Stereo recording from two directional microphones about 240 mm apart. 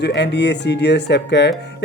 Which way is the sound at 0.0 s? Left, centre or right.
Left.